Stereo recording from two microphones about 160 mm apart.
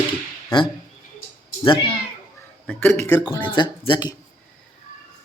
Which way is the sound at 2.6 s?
15° left (ahead or behind).